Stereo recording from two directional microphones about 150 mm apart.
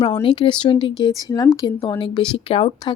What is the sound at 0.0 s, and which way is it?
Speech, 30° left (ahead or behind).